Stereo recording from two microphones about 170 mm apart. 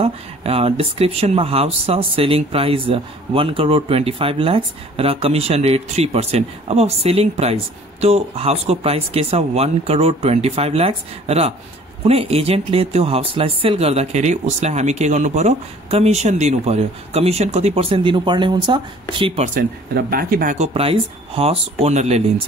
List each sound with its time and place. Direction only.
0.0 s speech: 35° right (ahead or behind)
19.5 s speech: 60° right (ahead or behind)
20.5 s speech: 35° right (ahead or behind)